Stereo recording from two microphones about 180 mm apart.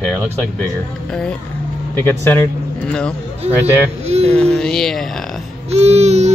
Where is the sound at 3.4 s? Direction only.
35° right (ahead or behind).